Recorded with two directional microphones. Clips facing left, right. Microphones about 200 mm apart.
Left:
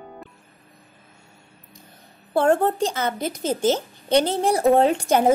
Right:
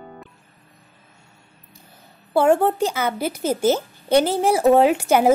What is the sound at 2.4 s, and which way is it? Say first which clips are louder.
A woman's voice: right 2 dB; 5° right (ahead or behind).